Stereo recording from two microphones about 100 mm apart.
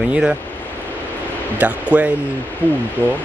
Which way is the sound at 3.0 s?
20° right (ahead or behind).